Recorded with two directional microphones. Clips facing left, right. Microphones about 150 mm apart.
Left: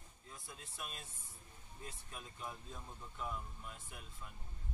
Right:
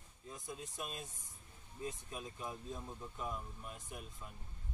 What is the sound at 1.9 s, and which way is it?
Speech, 15° right (ahead or behind).